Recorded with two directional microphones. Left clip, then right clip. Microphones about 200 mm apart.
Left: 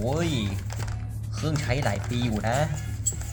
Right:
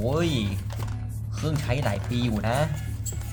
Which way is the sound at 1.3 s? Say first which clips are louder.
Left 1 dB; centre (ahead or behind).